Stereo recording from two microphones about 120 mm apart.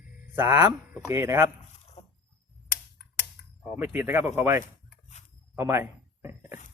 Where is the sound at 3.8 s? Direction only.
20° right (ahead or behind).